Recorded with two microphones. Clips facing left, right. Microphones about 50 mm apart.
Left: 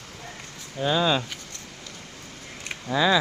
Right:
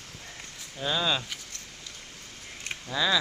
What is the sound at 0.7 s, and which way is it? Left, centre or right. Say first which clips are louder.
Speech: left 6 dB; centre.